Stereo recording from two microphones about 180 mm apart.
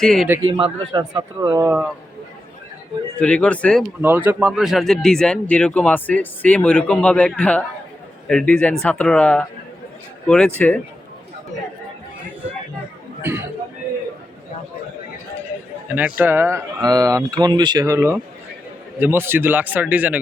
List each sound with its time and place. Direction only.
0.0 s speech: 5° left (ahead or behind)
0.4 s speech: 30° right (ahead or behind)
3.2 s speech: 5° left (ahead or behind)
4.0 s speech: 10° right (ahead or behind); by 10.8 s 10° left (ahead or behind)
13.2 s speech: 15° right (ahead or behind)
16.0 s speech: 10° right (ahead or behind)